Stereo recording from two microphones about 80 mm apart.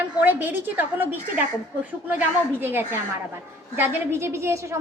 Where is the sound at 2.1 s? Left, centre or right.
Right.